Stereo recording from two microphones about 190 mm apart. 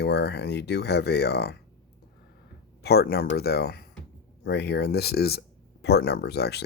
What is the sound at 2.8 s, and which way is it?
Speech, 55° left (ahead or behind).